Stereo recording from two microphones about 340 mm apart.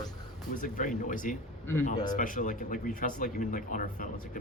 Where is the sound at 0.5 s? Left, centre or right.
Left.